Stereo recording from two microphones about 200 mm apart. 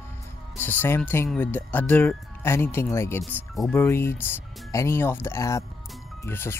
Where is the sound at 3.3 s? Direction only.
Centre (ahead or behind).